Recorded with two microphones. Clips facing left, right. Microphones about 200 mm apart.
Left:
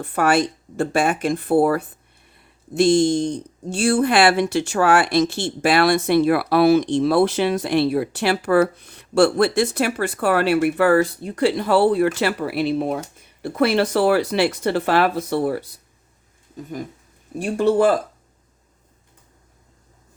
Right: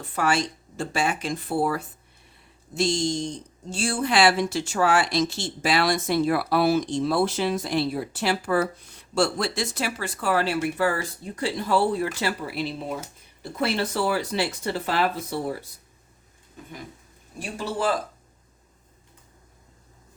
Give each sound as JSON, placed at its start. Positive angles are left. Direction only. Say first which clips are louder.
{"t": 0.0, "sound": "speech", "louder": "left 6 dB", "side_deg": 60}
{"t": 17.4, "sound": "speech", "louder": "left 10 dB", "side_deg": 60}